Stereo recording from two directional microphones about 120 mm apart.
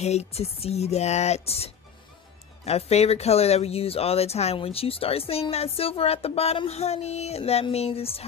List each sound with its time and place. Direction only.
0.0 s speech: 65° left (ahead or behind)